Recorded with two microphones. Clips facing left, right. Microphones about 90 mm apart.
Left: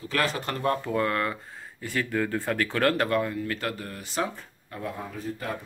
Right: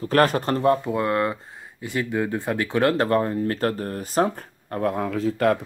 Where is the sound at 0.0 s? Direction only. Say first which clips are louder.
Right 9 dB; 45° right (ahead or behind); by 3.1 s 20° right (ahead or behind).